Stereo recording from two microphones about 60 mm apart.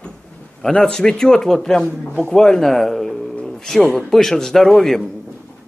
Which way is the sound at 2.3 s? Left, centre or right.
Centre.